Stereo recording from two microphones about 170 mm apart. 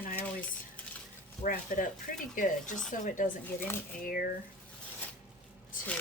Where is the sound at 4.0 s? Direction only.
55° left (ahead or behind).